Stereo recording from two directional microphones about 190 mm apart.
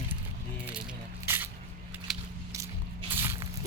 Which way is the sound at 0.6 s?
5° right (ahead or behind).